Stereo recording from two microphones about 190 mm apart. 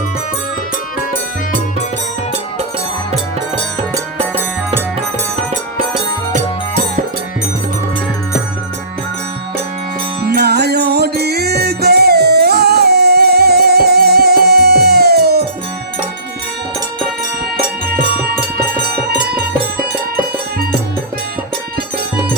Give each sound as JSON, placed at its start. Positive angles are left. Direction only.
{"t": 10.3, "sound": "music", "side_deg": -60}